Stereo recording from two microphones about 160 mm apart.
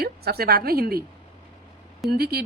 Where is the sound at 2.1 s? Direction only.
80° right.